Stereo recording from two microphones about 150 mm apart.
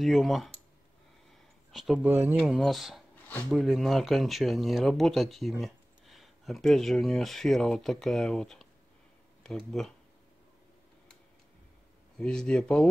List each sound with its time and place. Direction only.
0.0 s speech: centre (ahead or behind)
1.7 s speech: centre (ahead or behind)
2.0 s speech: 15° right (ahead or behind)
3.3 s speech: 10° left (ahead or behind)
3.6 s speech: centre (ahead or behind)
12.2 s speech: 5° left (ahead or behind)